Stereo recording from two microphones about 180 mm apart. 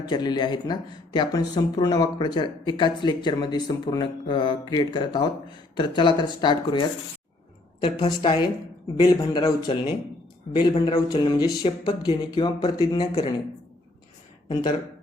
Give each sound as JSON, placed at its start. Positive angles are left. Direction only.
{"t": 0.1, "sound": "speech", "side_deg": 25}
{"t": 14.4, "sound": "speech", "side_deg": 25}